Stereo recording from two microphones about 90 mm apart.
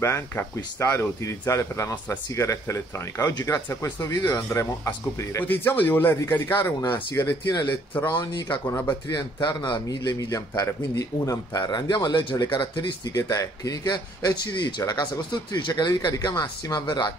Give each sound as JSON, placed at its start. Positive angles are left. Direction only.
{"t": 0.0, "sound": "speech", "side_deg": 30}
{"t": 5.4, "sound": "speech", "side_deg": 20}
{"t": 8.1, "sound": "speech", "side_deg": 60}
{"t": 8.6, "sound": "speech", "side_deg": 30}
{"t": 9.1, "sound": "a man's voice", "side_deg": 55}
{"t": 13.1, "sound": "a man's voice", "side_deg": 40}
{"t": 14.8, "sound": "speech", "side_deg": 40}
{"t": 15.5, "sound": "a man's voice", "side_deg": 55}